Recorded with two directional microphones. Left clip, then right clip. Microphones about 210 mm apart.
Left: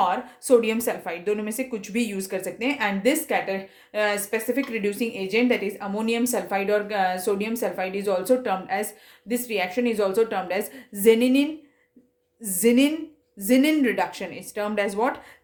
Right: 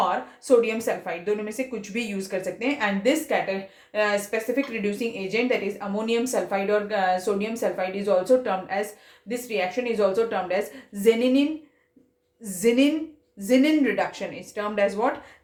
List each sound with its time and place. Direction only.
0.1 s speech: 50° left (ahead or behind)